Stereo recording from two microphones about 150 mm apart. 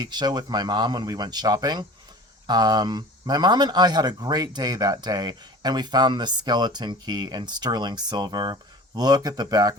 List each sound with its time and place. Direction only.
0.0 s speech: 30° right (ahead or behind)